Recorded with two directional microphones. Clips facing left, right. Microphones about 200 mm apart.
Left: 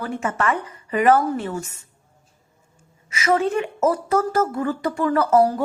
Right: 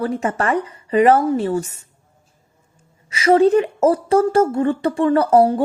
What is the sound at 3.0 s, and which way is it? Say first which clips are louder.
A woman's voice: right 7 dB; 30° right (ahead or behind).